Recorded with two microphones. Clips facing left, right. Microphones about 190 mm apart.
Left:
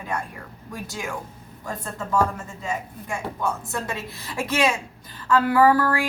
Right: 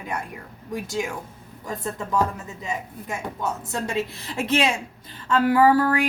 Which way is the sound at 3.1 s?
20° right (ahead or behind).